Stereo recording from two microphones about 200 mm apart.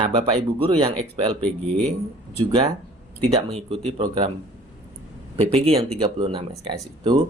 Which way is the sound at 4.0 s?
25° right (ahead or behind).